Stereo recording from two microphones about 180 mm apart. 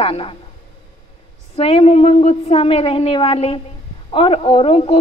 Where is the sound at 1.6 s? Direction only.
35° left (ahead or behind).